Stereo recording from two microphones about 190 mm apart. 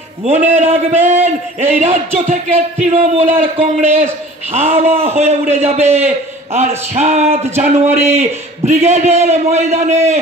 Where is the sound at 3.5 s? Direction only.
35° right (ahead or behind).